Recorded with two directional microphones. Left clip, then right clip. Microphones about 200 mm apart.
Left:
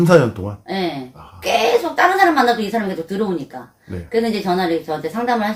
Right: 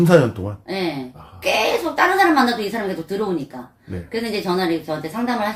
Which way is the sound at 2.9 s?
Centre (ahead or behind).